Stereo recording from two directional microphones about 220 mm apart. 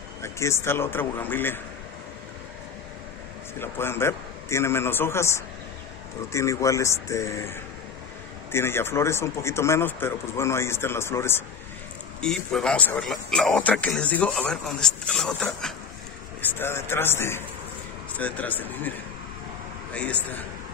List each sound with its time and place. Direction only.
0.2 s speech: 10° left (ahead or behind)
3.5 s speech: 10° left (ahead or behind)